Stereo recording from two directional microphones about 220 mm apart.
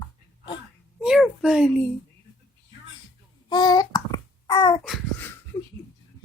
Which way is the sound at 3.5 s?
20° left (ahead or behind).